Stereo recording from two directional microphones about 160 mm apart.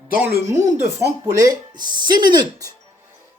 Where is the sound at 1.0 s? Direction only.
20° right (ahead or behind).